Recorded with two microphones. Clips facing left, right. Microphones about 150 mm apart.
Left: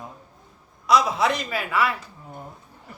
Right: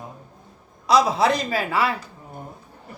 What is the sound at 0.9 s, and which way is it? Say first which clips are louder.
A man's voice: right 2 dB; 30° right (ahead or behind).